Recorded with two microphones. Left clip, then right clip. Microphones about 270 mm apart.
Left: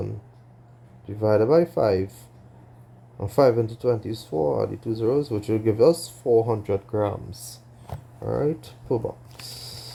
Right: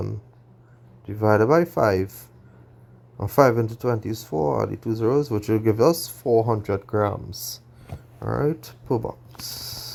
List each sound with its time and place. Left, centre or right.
1.0 s speech: right
3.2 s speech: right
9.6 s a sound: right